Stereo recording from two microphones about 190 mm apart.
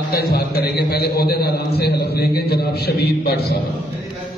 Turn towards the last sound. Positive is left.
turn(degrees=55)  # may be behind; listen again after turning